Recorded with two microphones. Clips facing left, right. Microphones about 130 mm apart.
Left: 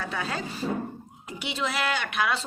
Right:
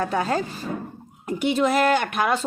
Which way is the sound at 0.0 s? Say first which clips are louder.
Right 8 dB; 45° right (ahead or behind).